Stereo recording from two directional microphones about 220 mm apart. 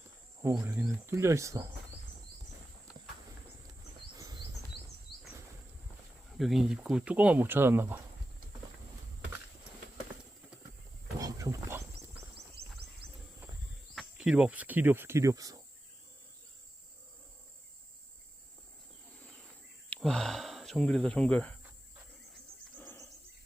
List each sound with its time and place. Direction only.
0.4 s speech: 15° right (ahead or behind)
4.2 s chirp: 15° right (ahead or behind)
5.1 s a sound: centre (ahead or behind)
6.3 s speech: centre (ahead or behind)
11.2 s wild animals: 15° right (ahead or behind)
13.9 s speech: centre (ahead or behind)
19.9 s speech: 5° left (ahead or behind)
22.8 s cricket: 10° left (ahead or behind)